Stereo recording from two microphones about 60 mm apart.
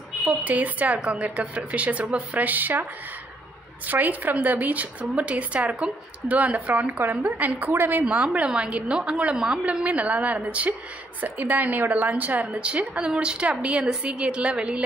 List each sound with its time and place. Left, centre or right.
0.4 s speech: right
8.0 s a woman's voice: centre